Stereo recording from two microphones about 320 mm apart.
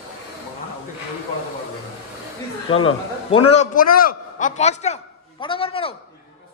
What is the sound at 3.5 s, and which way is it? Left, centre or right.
A man's voice, left.